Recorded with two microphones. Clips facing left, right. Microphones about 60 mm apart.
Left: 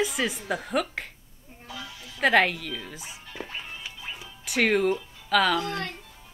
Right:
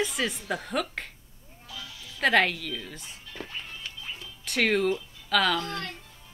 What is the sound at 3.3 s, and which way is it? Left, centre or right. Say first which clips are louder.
Music: left 2 dB; centre.